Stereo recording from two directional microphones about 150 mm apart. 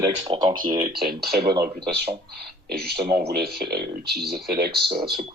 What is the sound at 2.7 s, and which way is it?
Speech, 90° right.